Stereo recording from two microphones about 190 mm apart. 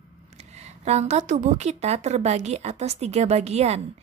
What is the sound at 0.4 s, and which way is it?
A woman's voice, 35° right (ahead or behind).